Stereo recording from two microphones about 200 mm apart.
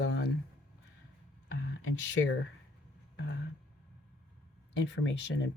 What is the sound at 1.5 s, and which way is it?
Speech, 70° left (ahead or behind).